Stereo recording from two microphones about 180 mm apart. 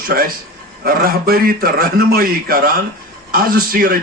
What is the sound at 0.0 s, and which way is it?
A man's voice, 55° right (ahead or behind).